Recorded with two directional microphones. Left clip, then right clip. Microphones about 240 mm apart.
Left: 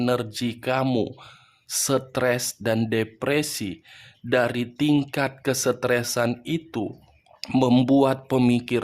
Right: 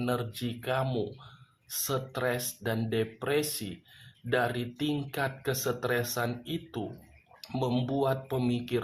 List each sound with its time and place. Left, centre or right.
0.0 s speech: left